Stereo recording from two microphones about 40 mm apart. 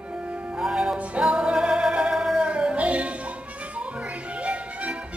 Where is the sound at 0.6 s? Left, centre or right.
Centre; by 3.2 s right.